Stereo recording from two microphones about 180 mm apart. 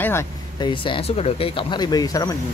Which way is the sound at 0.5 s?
25° left (ahead or behind).